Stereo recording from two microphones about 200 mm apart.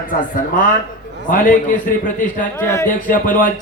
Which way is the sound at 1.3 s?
40° left (ahead or behind).